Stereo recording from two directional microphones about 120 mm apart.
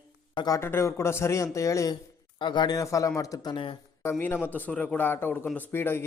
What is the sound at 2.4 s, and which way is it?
A man's voice, 40° left (ahead or behind).